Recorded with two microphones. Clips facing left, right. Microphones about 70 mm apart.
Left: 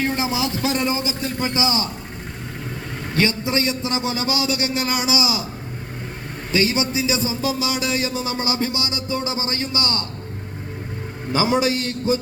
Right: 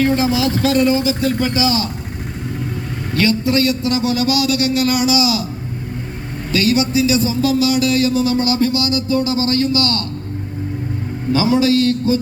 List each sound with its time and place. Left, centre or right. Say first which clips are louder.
0.0 s a man's voice: right 7 dB; left
3.2 s a man's voice: right 5 dB; left
6.5 s a man's voice: right 4 dB; left
11.3 s a man's voice: right 5 dB; left